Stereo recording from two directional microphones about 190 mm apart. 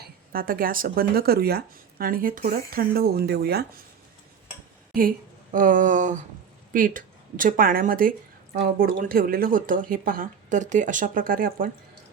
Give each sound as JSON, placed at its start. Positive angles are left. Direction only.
{"t": 0.0, "sound": "speech", "side_deg": -50}
{"t": 4.9, "sound": "speech", "side_deg": -45}